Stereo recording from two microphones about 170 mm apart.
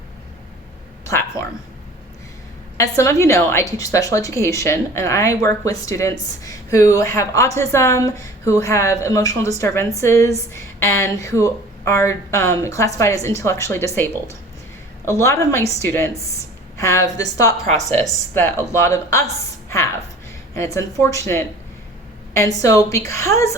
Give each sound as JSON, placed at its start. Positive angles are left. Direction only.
{"t": 1.0, "sound": "a sound", "side_deg": 15}
{"t": 2.7, "sound": "a woman's voice", "side_deg": 20}
{"t": 20.7, "sound": "a woman's voice", "side_deg": 20}